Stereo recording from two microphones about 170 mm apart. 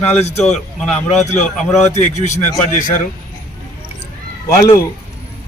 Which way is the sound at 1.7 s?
40° left (ahead or behind).